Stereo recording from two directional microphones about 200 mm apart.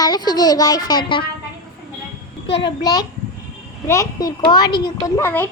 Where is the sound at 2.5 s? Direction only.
25° left (ahead or behind).